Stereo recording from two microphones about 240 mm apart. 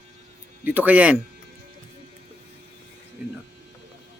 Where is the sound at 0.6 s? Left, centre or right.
Centre.